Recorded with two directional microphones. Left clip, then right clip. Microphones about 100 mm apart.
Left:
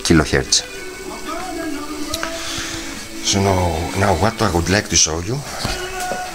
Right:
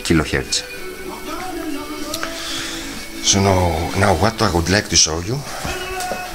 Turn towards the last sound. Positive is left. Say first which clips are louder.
# right 1 dB
turn(degrees=0)  # may be behind; listen again after turning